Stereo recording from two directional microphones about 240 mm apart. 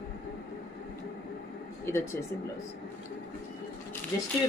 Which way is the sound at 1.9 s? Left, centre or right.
Centre.